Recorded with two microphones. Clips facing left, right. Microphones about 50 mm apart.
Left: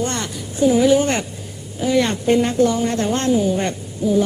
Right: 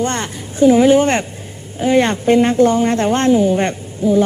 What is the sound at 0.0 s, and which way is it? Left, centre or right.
A woman's voice, right.